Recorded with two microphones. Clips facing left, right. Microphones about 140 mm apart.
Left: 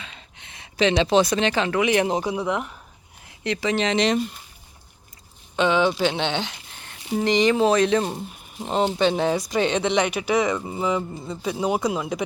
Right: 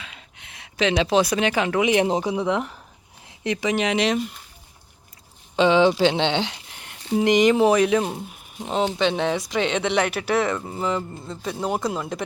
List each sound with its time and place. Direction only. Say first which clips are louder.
0.0 s speech: even; 5° right (ahead or behind)
5.5 s speech: right 3 dB; 25° right (ahead or behind); by 12.2 s centre (ahead or behind)